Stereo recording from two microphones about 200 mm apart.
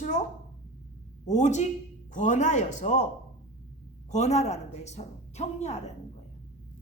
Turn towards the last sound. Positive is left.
turn(degrees=35)  # may be behind; listen again after turning